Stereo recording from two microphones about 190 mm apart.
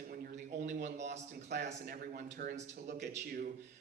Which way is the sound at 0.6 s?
40° right (ahead or behind).